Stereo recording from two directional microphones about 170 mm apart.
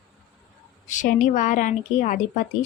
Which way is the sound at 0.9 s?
50° left (ahead or behind).